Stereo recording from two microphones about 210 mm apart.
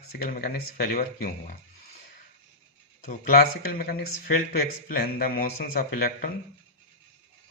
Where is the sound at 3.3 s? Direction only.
45° left (ahead or behind).